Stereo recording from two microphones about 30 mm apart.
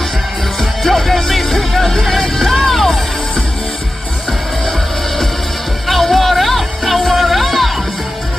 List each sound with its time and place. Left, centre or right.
0.6 s music: centre
5.9 s music: centre